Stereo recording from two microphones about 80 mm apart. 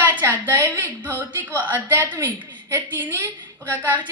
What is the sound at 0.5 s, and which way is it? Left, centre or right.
Speech, right.